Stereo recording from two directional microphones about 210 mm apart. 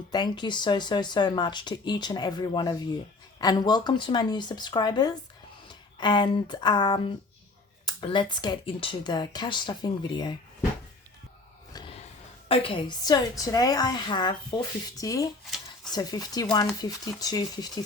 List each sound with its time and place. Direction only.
0.1 s speech: 20° left (ahead or behind)
11.7 s a sound: 25° left (ahead or behind)
12.5 s speech: 25° left (ahead or behind)